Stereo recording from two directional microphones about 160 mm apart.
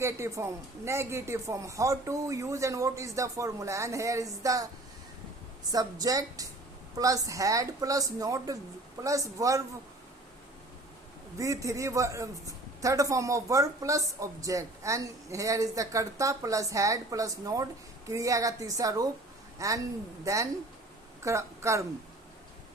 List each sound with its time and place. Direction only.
0.0 s a woman's voice: 20° right (ahead or behind)
5.7 s a woman's voice: 20° right (ahead or behind)
11.3 s a woman's voice: 20° right (ahead or behind)